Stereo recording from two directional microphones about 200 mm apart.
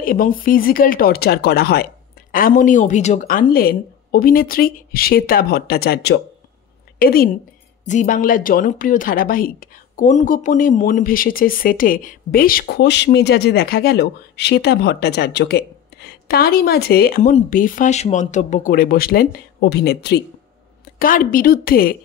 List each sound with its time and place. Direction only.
0.0 s a woman's voice: 45° left (ahead or behind)
17.3 s a woman's voice: 40° left (ahead or behind); by 20.2 s 55° left (ahead or behind)
21.0 s a woman's voice: 45° left (ahead or behind)